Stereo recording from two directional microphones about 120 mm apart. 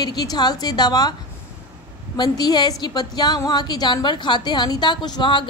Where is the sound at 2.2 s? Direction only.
35° left (ahead or behind).